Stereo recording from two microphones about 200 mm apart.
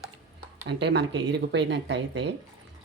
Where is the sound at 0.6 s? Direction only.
60° right (ahead or behind).